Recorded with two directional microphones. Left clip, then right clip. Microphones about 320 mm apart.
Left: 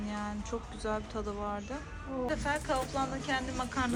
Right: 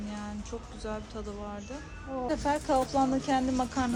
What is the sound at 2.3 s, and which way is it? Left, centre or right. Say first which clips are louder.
A woman's voice: right 5 dB; centre.